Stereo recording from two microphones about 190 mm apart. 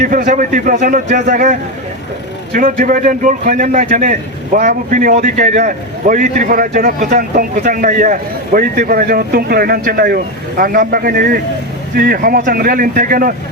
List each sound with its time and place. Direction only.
0.0 s a man's voice: 45° right (ahead or behind)